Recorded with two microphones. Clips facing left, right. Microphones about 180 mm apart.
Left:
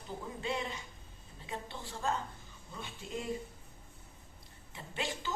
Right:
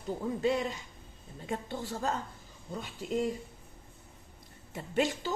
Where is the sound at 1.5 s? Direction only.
45° right (ahead or behind).